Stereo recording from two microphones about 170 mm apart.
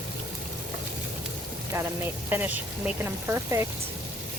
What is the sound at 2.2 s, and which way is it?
Speech, 10° right (ahead or behind).